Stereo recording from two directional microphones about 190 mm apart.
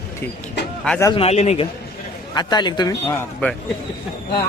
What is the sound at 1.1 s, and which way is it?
Speech, 35° left (ahead or behind).